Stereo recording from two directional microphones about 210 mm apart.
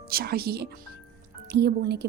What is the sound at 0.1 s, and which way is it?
A woman's voice, 45° right (ahead or behind).